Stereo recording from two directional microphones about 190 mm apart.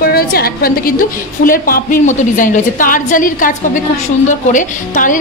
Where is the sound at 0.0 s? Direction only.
50° left (ahead or behind).